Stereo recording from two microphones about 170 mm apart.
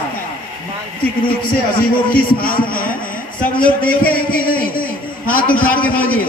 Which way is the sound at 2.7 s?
55° left (ahead or behind).